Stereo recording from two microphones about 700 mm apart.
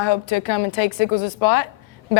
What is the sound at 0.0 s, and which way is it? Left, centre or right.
A woman's voice, left.